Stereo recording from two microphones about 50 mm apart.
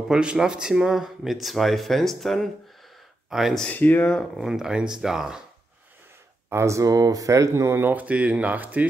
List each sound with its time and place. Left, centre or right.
0.1 s speech: centre
3.7 s speech: left
4.4 s speech: centre
6.5 s speech: right
7.2 s speech: right
7.9 s speech: right